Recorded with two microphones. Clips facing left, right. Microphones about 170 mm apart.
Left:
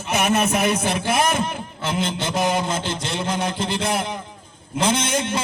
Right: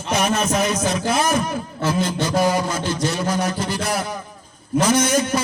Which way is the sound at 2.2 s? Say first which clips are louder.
Right 3 dB; 25° left (ahead or behind).